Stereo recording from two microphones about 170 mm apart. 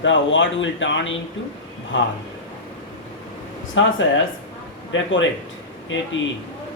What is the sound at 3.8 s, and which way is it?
Speech, 90° left.